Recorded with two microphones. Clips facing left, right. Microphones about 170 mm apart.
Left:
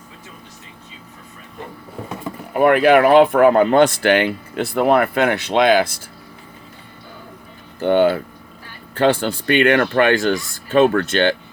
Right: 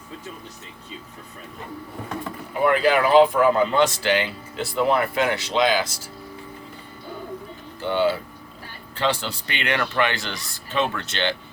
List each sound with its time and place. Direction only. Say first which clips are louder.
2.5 s speech: left 7 dB; 60° left (ahead or behind)
7.8 s speech: left 7 dB; 55° left (ahead or behind)